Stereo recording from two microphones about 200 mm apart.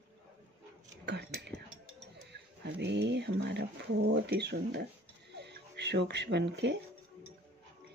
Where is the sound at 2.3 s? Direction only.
60° right (ahead or behind).